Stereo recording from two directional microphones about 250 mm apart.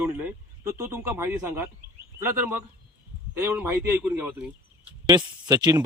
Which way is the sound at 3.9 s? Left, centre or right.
Centre.